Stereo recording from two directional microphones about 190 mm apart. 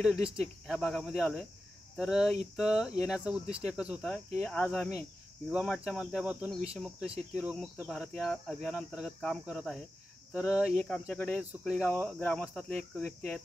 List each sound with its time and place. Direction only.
0.0 s speech: centre (ahead or behind)